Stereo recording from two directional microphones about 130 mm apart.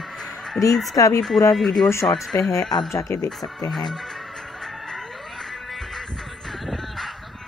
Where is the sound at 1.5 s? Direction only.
Centre (ahead or behind).